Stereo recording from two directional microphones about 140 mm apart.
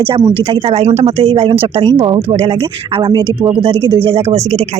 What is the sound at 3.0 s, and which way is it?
Speech, 30° right (ahead or behind).